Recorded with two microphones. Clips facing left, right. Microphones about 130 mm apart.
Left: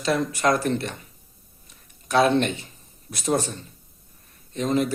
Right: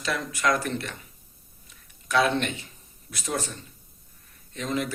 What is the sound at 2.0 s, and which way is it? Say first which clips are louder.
Speech: left 4 dB; 35° left (ahead or behind).